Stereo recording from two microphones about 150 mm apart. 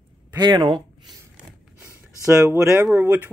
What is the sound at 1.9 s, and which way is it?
Speech, 15° right (ahead or behind).